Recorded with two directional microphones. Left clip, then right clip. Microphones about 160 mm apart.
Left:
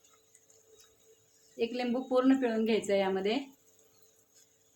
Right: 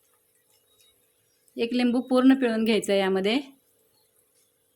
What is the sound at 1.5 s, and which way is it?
Speech, 65° right (ahead or behind).